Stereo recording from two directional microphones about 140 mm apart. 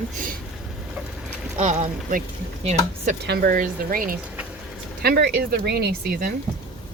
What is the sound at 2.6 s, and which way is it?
Speech, 75° right (ahead or behind).